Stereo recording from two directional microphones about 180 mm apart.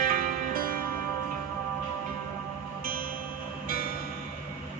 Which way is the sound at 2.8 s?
55° right (ahead or behind).